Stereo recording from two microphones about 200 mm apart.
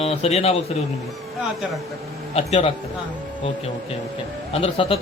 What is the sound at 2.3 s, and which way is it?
Speech, 30° left (ahead or behind).